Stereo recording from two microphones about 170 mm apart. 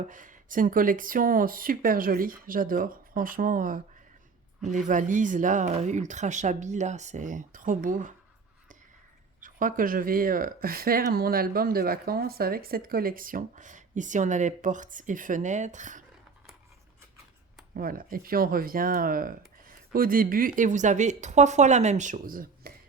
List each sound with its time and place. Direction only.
0.1 s speech: 50° right (ahead or behind)
9.4 s speech: 50° right (ahead or behind)
17.7 s speech: 55° right (ahead or behind)